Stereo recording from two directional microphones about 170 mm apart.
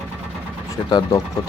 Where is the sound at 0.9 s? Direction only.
25° left (ahead or behind).